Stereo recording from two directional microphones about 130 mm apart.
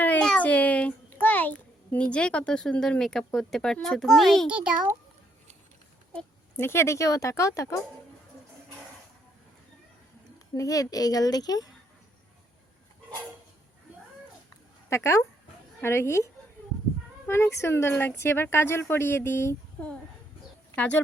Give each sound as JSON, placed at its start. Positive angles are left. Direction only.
{"t": 0.0, "sound": "a child's voice", "side_deg": 10}
{"t": 4.4, "sound": "a child's voice", "side_deg": -10}
{"t": 6.6, "sound": "speech", "side_deg": 20}
{"t": 10.5, "sound": "speech", "side_deg": 25}
{"t": 14.8, "sound": "speech", "side_deg": 20}